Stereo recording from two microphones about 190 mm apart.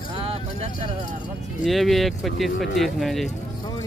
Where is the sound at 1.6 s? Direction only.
Centre (ahead or behind).